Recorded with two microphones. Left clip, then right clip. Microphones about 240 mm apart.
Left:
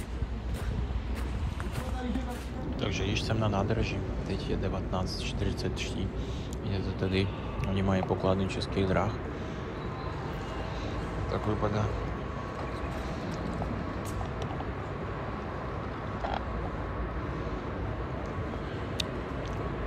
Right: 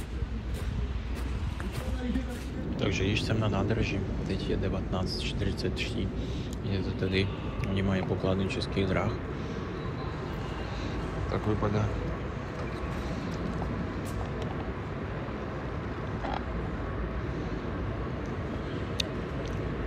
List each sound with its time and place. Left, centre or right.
2.8 s a man's voice: centre
11.3 s a man's voice: centre